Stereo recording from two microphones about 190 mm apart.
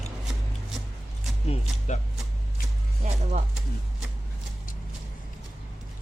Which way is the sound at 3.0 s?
40° right (ahead or behind).